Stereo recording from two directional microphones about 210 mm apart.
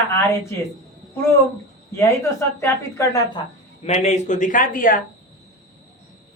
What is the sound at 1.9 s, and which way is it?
Speech, 15° left (ahead or behind).